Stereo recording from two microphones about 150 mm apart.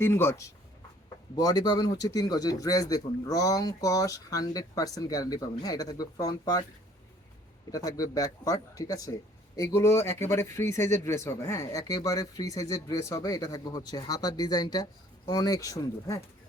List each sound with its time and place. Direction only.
0.0 s speech: 15° left (ahead or behind)
7.7 s speech: 25° left (ahead or behind)